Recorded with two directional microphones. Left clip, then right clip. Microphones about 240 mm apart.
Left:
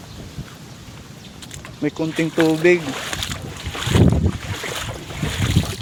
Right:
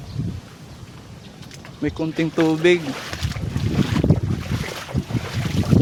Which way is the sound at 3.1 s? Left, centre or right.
Left.